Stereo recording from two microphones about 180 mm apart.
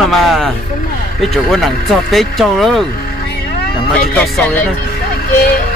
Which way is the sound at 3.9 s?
5° left (ahead or behind).